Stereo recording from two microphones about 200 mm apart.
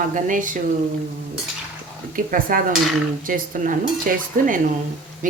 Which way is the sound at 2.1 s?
45° right (ahead or behind).